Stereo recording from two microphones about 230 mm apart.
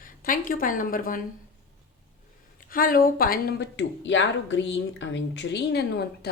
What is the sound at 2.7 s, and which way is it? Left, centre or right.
Speech, left.